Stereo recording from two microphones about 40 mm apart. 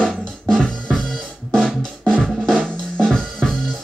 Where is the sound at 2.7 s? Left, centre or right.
Centre.